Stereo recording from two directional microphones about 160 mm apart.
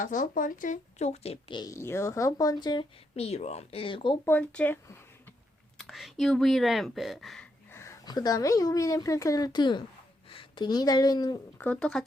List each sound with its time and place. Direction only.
0.0 s a woman's voice: 55° left (ahead or behind); by 2.8 s 25° left (ahead or behind)
3.2 s speech: 40° left (ahead or behind)
4.3 s speech: 10° left (ahead or behind)
5.7 s speech: centre (ahead or behind)
7.7 s a woman's voice: 15° left (ahead or behind)
11.5 s speech: 10° left (ahead or behind)